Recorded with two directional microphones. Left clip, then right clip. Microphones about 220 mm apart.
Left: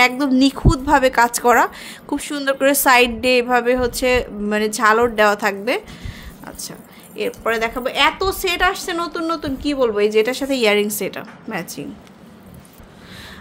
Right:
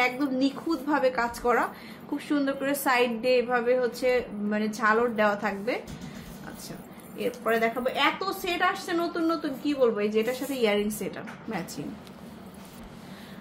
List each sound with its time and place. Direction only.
0.0 s a woman's voice: 55° left (ahead or behind)
7.4 s a woman's voice: 55° left (ahead or behind)